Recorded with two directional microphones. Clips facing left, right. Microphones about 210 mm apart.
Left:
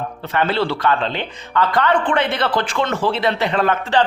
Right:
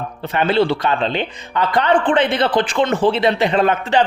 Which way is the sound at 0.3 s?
15° right (ahead or behind).